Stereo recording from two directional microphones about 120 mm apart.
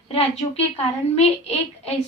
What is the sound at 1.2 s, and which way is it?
Speech, 60° left (ahead or behind).